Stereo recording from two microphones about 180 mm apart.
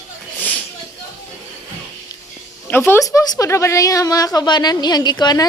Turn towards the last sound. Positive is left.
turn(degrees=25)  # may be behind; listen again after turning